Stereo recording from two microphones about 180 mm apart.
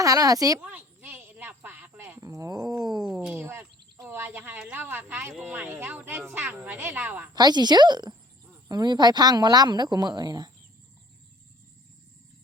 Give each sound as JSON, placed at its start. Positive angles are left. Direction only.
{"t": 0.0, "sound": "a woman's voice", "side_deg": -20}
{"t": 0.6, "sound": "a sound", "side_deg": -10}
{"t": 5.3, "sound": "speech", "side_deg": -5}
{"t": 7.3, "sound": "a woman's voice", "side_deg": -25}